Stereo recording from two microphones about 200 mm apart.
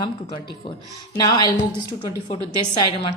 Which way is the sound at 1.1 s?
20° left (ahead or behind).